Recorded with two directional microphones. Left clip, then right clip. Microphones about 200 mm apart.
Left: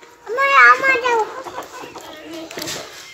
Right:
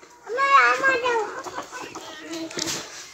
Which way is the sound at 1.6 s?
45° right (ahead or behind).